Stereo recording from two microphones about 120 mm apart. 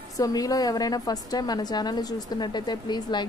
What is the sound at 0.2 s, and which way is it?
A woman's voice, 30° left (ahead or behind).